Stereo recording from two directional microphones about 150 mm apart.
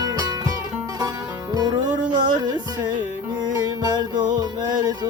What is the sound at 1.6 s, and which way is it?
Music, 30° right (ahead or behind).